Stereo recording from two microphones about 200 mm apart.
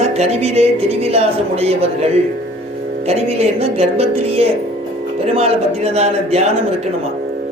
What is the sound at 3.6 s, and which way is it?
Speech, 30° right (ahead or behind).